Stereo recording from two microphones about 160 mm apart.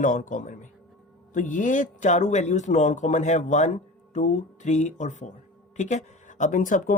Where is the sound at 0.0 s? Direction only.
55° left (ahead or behind).